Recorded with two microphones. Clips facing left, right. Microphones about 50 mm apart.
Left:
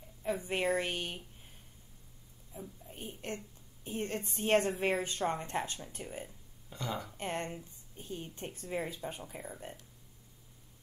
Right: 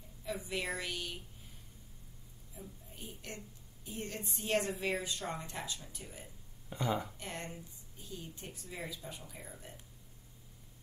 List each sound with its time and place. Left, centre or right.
0.2 s a woman's voice: left
2.5 s a sound: left
3.8 s a woman's voice: left
6.7 s speech: centre
7.2 s a woman's voice: left